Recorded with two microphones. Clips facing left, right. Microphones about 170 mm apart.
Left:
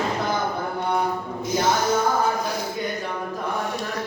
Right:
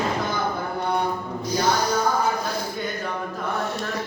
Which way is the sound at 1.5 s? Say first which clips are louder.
Left 1 dB; 25° left (ahead or behind).